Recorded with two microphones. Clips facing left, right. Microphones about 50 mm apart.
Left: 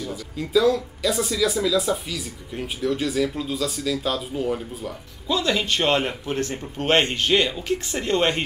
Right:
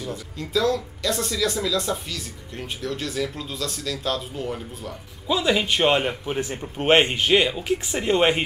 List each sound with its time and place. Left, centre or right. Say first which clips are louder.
0.4 s speech: left 4 dB; centre
5.3 s speech: right 1 dB; centre